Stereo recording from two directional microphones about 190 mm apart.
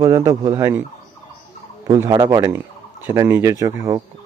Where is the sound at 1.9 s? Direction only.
20° right (ahead or behind).